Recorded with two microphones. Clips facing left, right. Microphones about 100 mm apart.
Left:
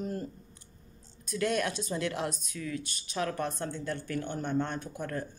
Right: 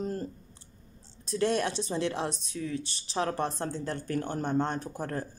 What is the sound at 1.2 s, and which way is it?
A woman's voice, 30° right (ahead or behind).